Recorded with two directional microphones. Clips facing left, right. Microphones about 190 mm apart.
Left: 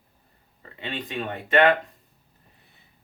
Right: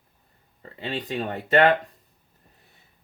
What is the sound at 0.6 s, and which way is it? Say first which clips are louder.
Speech: right 3 dB; 35° right (ahead or behind).